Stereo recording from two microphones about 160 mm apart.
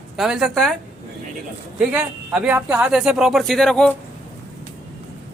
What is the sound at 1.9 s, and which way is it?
Speech, 10° right (ahead or behind).